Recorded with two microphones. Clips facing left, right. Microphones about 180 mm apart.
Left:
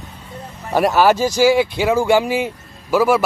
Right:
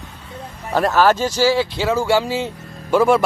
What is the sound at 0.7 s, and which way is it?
Speech, 10° left (ahead or behind).